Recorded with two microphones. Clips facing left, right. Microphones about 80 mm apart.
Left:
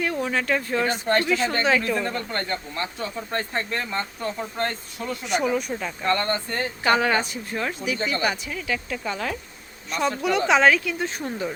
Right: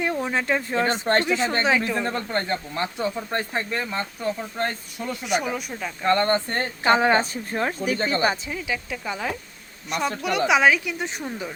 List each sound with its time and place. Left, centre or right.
0.0 s speech: right
3.2 s speech: centre
6.1 s speech: right
6.8 s speech: right
8.1 s speech: right
8.4 s speech: centre
11.2 s speech: centre